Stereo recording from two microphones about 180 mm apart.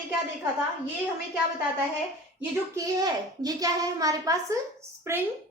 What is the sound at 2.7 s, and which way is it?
A child's voice, 20° right (ahead or behind).